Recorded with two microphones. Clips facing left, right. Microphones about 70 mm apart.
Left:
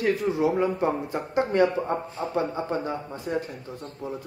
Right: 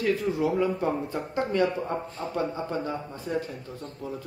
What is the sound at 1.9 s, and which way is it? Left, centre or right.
Speech, centre.